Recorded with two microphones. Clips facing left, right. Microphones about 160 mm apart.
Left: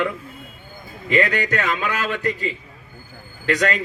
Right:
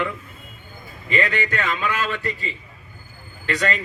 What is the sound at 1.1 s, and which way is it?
A man's voice, 40° left (ahead or behind).